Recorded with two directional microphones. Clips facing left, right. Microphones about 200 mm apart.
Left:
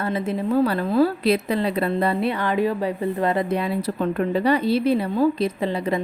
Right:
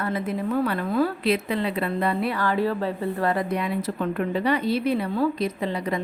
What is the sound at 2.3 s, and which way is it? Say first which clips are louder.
Speech: left 2 dB; 20° left (ahead or behind).